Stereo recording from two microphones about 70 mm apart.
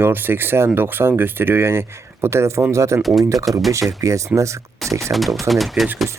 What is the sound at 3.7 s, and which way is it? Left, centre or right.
Speech, right.